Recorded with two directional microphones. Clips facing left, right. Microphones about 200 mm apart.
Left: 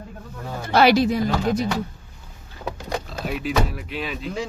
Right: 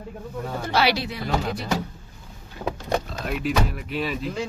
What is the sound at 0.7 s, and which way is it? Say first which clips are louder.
Speech: left 8 dB; 50° left (ahead or behind).